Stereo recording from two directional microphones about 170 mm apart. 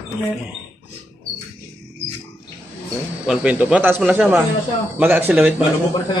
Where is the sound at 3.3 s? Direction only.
10° right (ahead or behind).